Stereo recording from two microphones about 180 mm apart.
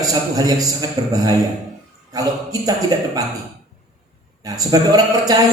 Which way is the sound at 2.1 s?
20° right (ahead or behind).